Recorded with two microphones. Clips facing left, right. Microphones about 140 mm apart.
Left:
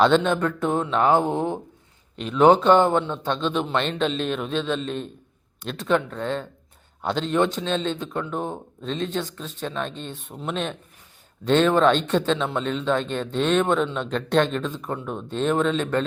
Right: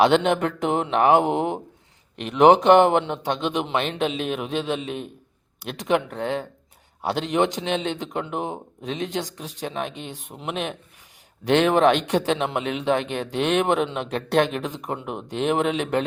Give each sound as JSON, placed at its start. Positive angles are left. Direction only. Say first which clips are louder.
{"t": 0.0, "sound": "a man's voice", "louder": "right 1 dB", "side_deg": -15}
{"t": 0.8, "sound": "mantra", "louder": "right 2 dB", "side_deg": -70}
{"t": 1.2, "sound": "a man's voice", "louder": "right 1 dB", "side_deg": -15}
{"t": 2.1, "sound": "mantra", "louder": "right 1 dB", "side_deg": -70}
{"t": 3.0, "sound": "a man's voice", "louder": "even", "side_deg": -15}